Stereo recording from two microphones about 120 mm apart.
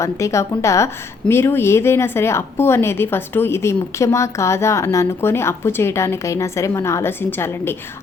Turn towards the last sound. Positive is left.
turn(degrees=20)  # may be behind; listen again after turning